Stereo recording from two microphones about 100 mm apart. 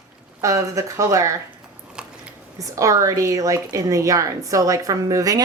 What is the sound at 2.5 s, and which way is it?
A woman's voice, 35° right (ahead or behind).